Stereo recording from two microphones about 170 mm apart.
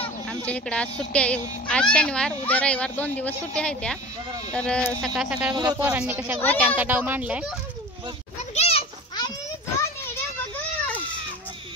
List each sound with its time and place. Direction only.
0.3 s speech: 10° left (ahead or behind)
5.5 s speech: 25° right (ahead or behind)
5.9 s speech: 10° right (ahead or behind)
8.5 s children playing: 35° left (ahead or behind)